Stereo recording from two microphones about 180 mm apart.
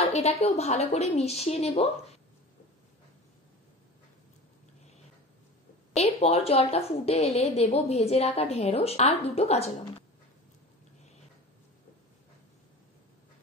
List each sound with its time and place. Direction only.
0.0 s a woman's voice: 35° left (ahead or behind)
5.9 s a woman's voice: 35° left (ahead or behind)